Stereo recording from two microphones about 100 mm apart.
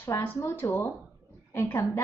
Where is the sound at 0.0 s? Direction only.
25° left (ahead or behind).